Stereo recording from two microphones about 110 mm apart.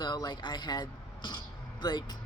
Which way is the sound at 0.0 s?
40° left (ahead or behind).